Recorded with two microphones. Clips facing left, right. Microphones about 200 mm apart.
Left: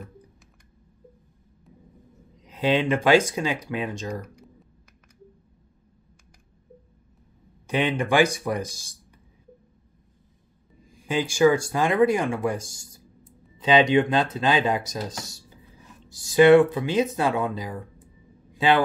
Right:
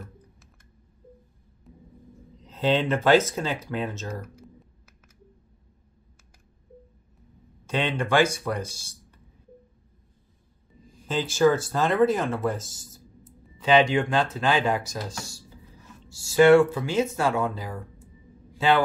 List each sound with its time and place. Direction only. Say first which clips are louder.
2.4 s speech: left 1 dB; 10° left (ahead or behind)
7.6 s speech: left 3 dB; 15° left (ahead or behind)
11.0 s speech: left 2 dB; 10° left (ahead or behind)
18.5 s a sound: left 1 dB; 15° left (ahead or behind)